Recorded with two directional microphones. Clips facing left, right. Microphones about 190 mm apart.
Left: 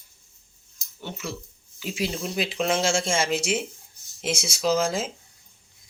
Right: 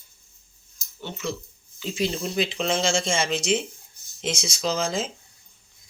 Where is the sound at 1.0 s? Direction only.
10° left (ahead or behind).